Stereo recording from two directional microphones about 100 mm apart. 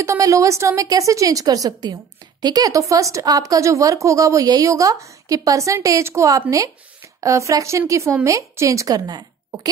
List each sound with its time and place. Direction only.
0.0 s speech: 30° right (ahead or behind)